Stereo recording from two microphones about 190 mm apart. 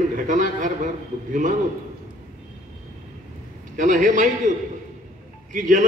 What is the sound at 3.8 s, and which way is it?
Speech, 40° right (ahead or behind).